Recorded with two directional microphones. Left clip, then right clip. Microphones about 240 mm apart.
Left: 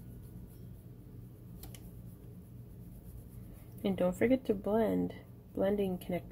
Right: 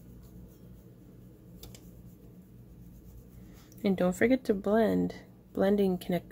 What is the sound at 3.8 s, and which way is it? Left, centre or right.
Speech, right.